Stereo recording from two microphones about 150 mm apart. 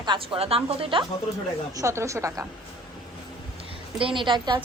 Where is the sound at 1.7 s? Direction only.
20° right (ahead or behind).